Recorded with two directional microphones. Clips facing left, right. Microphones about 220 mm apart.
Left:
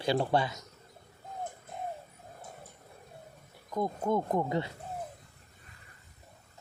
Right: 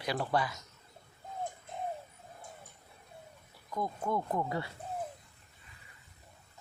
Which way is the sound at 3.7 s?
20° left (ahead or behind).